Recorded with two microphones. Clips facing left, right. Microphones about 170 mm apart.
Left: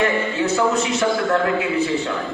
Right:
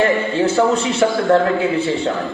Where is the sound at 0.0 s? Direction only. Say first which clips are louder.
Right 4 dB; 30° right (ahead or behind).